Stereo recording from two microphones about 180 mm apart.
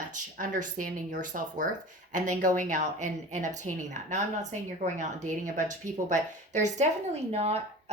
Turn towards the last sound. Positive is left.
turn(degrees=-35)  # may be behind; listen again after turning